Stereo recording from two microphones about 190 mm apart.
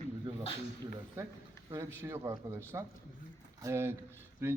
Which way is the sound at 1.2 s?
15° right (ahead or behind).